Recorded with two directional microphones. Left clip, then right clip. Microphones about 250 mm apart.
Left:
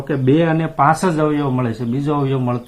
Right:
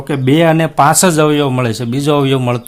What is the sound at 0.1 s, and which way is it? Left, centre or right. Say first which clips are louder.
Speech: right 5 dB; right.